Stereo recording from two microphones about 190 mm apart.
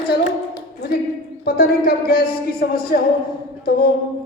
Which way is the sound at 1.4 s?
55° left (ahead or behind).